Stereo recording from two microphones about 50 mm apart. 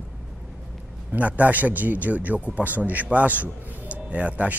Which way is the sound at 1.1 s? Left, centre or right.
Right.